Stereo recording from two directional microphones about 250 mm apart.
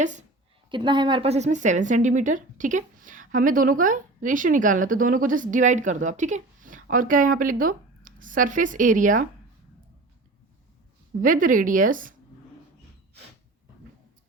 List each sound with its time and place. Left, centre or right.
0.0 s a woman's voice: right
0.7 s a woman's voice: centre
11.2 s a woman's voice: right